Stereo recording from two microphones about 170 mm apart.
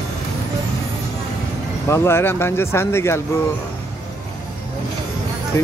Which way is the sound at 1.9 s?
15° left (ahead or behind).